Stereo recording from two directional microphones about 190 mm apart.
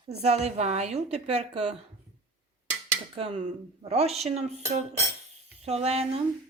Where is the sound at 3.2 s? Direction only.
35° right (ahead or behind).